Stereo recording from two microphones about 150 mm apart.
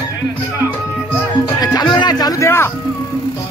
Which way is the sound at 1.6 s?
25° left (ahead or behind).